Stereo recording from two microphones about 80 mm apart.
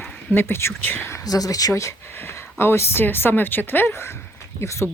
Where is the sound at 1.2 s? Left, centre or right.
Left.